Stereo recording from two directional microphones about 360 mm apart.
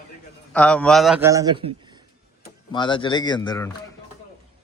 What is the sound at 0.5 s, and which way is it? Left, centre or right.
A man's voice, centre.